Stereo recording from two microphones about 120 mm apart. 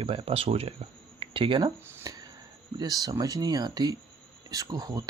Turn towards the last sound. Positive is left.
turn(degrees=-30)  # may be behind; listen again after turning